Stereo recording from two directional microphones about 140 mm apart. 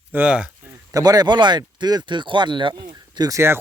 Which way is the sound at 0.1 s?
10° right (ahead or behind).